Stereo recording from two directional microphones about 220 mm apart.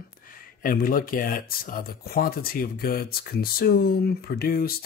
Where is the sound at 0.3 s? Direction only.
40° left (ahead or behind).